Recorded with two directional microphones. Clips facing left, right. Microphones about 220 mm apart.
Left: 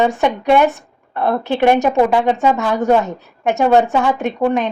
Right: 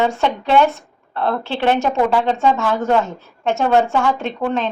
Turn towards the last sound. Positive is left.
turn(degrees=15)  # may be behind; listen again after turning